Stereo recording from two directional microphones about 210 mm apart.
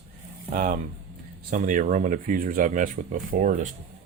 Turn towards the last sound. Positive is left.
turn(degrees=-40)  # may be behind; listen again after turning